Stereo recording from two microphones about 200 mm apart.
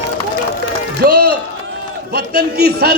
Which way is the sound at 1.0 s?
55° right (ahead or behind).